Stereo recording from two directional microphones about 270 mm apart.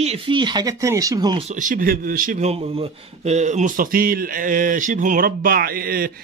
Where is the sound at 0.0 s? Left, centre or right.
Right.